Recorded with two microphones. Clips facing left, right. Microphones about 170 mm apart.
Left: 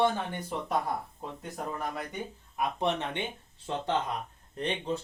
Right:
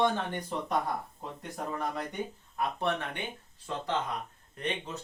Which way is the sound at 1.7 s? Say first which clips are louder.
Right 1 dB; 5° left (ahead or behind).